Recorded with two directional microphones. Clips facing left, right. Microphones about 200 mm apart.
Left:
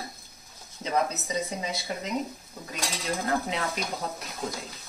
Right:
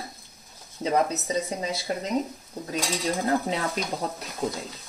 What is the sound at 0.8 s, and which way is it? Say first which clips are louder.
Speech: right 4 dB; 35° right (ahead or behind).